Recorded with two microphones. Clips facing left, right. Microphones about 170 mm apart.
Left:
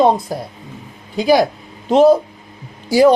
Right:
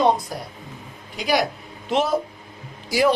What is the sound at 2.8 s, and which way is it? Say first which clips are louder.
Speech: left 9 dB; 30° left (ahead or behind).